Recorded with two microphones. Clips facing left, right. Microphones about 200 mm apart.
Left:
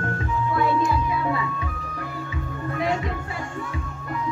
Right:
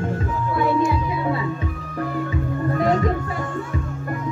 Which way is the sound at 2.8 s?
45° right (ahead or behind).